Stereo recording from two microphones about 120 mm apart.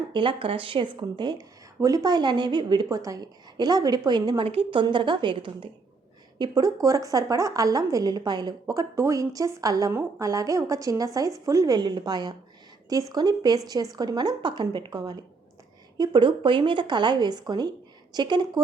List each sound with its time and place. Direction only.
0.1 s a woman's voice: 45° right (ahead or behind)
4.4 s speech: 50° right (ahead or behind)
6.4 s a woman's voice: 30° right (ahead or behind)